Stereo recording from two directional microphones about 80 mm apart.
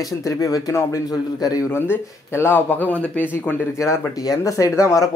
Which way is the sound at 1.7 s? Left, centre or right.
Left.